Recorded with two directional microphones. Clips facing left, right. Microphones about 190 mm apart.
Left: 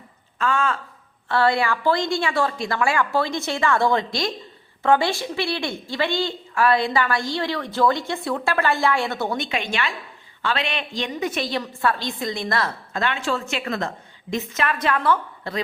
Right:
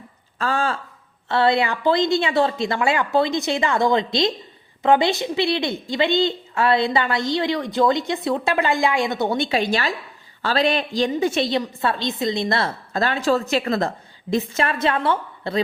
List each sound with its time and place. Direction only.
0.3 s speech: 35° right (ahead or behind)
1.3 s a woman's voice: 20° right (ahead or behind)